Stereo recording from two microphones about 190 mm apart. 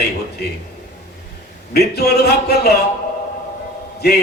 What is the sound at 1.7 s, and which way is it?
A man's voice, 55° left (ahead or behind).